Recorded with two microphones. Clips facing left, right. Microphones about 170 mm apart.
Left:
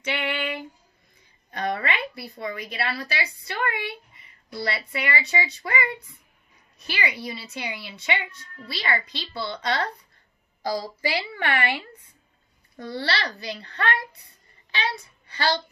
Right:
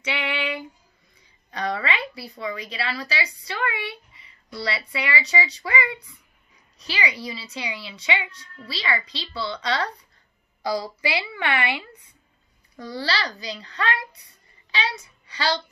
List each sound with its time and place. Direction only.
0.0 s female singing: 50° left (ahead or behind)
1.5 s a woman's voice: 55° left (ahead or behind)
12.8 s a child's voice: 60° left (ahead or behind)